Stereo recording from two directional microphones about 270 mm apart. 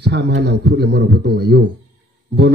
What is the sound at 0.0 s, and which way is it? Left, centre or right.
A man's voice, right.